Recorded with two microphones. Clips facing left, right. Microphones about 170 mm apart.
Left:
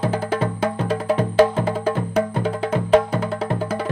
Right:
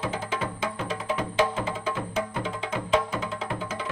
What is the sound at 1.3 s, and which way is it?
Music, 55° left (ahead or behind).